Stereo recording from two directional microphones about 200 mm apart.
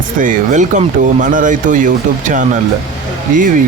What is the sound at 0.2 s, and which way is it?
Speech, 40° right (ahead or behind).